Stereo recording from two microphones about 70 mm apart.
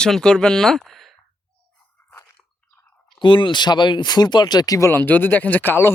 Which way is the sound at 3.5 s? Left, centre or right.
Left.